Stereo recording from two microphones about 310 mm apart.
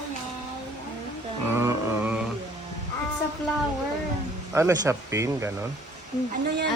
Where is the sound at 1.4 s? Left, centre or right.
Centre.